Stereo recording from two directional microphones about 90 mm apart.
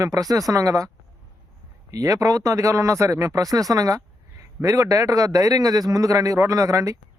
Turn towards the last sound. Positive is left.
turn(degrees=-35)  # may be behind; listen again after turning